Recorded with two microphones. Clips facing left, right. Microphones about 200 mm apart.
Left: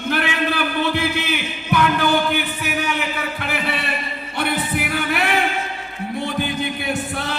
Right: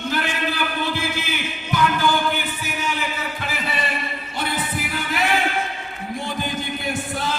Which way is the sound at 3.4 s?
65° left (ahead or behind).